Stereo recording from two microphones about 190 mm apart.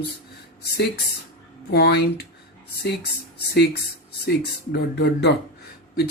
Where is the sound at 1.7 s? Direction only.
60° left (ahead or behind).